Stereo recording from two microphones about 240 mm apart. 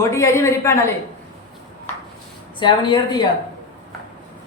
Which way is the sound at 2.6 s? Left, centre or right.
Centre.